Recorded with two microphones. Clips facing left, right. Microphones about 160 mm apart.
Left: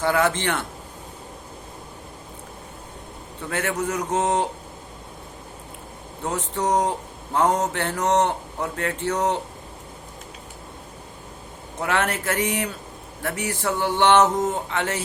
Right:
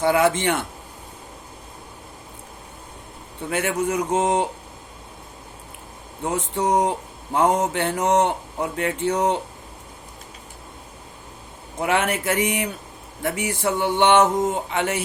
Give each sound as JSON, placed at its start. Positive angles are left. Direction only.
{"t": 0.0, "sound": "speech", "side_deg": -15}
{"t": 3.5, "sound": "speech", "side_deg": -15}
{"t": 6.5, "sound": "speech", "side_deg": -15}
{"t": 11.8, "sound": "speech", "side_deg": -15}